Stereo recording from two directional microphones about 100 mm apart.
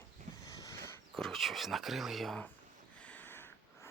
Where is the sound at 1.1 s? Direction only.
5° left (ahead or behind).